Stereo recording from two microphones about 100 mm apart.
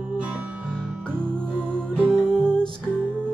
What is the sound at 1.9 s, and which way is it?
Music, 10° left (ahead or behind).